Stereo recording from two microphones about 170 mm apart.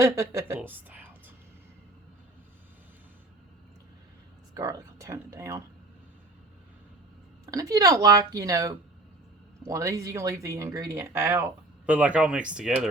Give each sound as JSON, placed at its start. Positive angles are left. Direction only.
{"t": 0.0, "sound": "speech", "side_deg": -15}
{"t": 4.5, "sound": "speech", "side_deg": -20}
{"t": 7.4, "sound": "speech", "side_deg": -20}